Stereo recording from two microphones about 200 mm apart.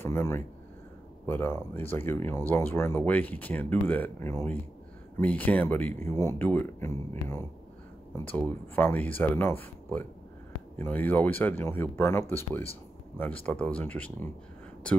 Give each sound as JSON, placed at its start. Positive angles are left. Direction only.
{"t": 0.0, "sound": "speech", "side_deg": 10}